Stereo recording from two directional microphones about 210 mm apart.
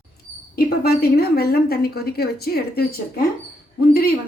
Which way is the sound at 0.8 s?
50° left (ahead or behind).